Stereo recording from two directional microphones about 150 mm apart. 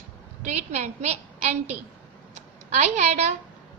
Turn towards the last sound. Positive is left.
turn(degrees=-45)  # may be behind; listen again after turning